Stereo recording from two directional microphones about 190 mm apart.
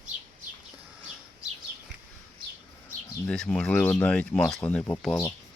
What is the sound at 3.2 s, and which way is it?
Speech, 5° left (ahead or behind).